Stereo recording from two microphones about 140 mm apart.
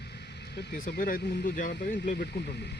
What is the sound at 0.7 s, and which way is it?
Speech, 90° left.